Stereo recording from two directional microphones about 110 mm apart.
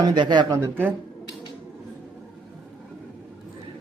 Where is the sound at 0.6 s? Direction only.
20° right (ahead or behind).